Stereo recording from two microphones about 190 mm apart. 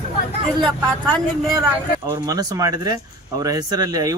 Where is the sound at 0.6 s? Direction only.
5° left (ahead or behind).